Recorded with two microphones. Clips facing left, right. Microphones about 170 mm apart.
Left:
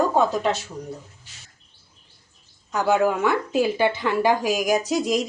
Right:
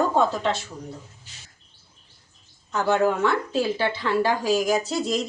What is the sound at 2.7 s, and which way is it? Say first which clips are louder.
Speech: left 1 dB; 10° left (ahead or behind).